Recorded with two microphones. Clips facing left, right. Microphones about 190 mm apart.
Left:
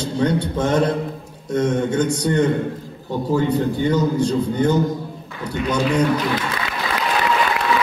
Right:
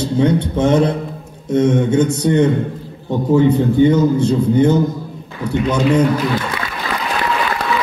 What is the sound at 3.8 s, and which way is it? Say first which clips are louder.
Speech: right 4 dB; 25° right (ahead or behind).